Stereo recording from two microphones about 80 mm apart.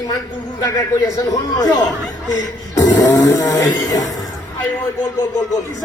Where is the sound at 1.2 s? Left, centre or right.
Left.